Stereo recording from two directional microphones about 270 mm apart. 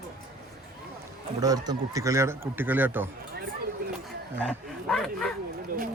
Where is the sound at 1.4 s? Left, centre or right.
Centre.